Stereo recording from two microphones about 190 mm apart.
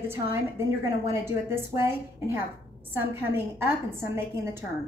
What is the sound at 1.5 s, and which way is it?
A woman's voice, 15° right (ahead or behind).